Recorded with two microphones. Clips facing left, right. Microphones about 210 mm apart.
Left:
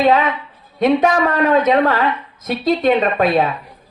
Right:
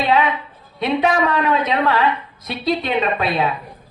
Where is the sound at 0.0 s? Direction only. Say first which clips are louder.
Left 3 dB; 45° left (ahead or behind).